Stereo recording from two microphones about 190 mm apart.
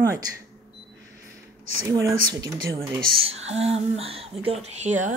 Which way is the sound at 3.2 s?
30° right (ahead or behind).